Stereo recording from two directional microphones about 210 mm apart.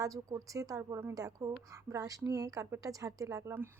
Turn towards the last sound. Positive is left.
turn(degrees=-15)  # may be behind; listen again after turning